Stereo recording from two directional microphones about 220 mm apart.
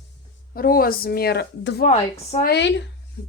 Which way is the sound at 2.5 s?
55° left (ahead or behind).